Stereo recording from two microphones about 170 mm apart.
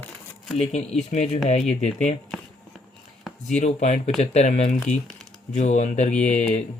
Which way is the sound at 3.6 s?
40° left (ahead or behind).